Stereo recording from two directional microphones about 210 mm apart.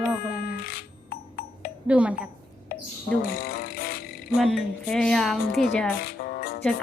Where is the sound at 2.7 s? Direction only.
45° left (ahead or behind).